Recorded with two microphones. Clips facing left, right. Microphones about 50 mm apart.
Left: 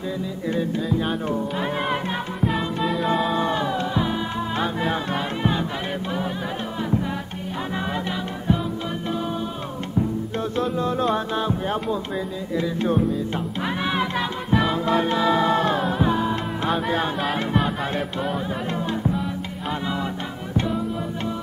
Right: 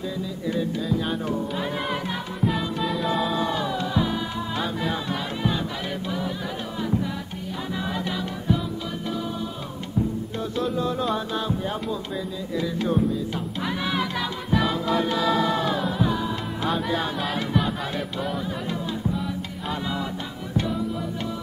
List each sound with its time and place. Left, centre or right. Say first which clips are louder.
0.5 s music: left 2 dB; left
2.5 s music: left 2 dB; centre
3.3 s music: left 3 dB; left
6.8 s music: left 1 dB; left
10.5 s music: left 1 dB; left